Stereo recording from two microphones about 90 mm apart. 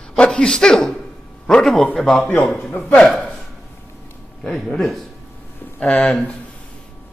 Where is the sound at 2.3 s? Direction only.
20° left (ahead or behind).